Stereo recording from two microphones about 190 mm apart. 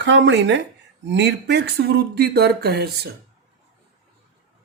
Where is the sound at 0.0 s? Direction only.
70° right (ahead or behind).